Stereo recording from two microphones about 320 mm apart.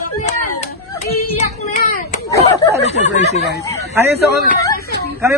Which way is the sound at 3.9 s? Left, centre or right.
Centre.